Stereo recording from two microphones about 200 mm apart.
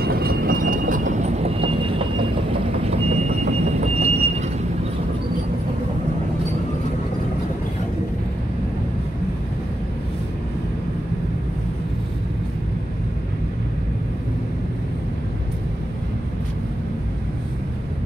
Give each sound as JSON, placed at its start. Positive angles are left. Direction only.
{"t": 0.0, "sound": "train", "side_deg": -50}
{"t": 2.9, "sound": "vehicle", "side_deg": -35}